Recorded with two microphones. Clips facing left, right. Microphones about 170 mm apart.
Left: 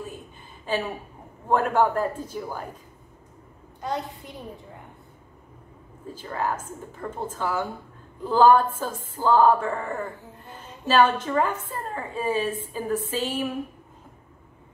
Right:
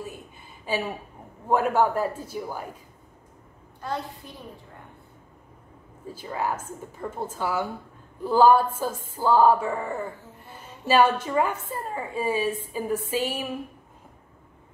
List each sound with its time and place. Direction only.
0.7 s a woman's voice: 10° right (ahead or behind)
3.8 s a child's voice: 20° left (ahead or behind)
6.1 s a woman's voice: 10° right (ahead or behind)